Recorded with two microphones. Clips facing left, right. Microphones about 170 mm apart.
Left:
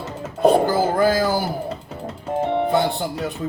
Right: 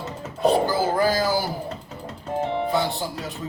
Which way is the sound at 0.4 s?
50° left (ahead or behind).